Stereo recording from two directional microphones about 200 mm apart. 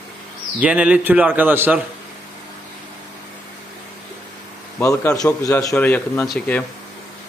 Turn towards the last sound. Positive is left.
turn(degrees=5)  # may be behind; listen again after turning